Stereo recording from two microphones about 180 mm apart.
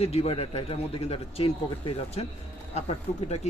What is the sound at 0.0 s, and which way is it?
Speech, 35° left (ahead or behind).